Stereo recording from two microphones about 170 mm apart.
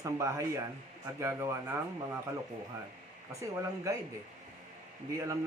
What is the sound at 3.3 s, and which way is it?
Speech, 20° right (ahead or behind).